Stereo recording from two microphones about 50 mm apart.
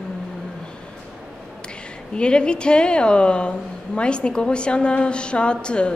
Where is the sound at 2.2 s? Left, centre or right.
Centre.